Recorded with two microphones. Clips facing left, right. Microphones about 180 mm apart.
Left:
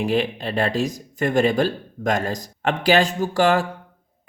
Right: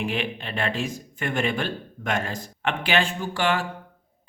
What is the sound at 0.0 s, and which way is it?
Speech, 40° left (ahead or behind).